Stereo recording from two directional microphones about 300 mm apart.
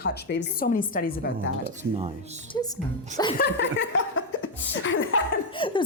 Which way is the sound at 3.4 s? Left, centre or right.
Left.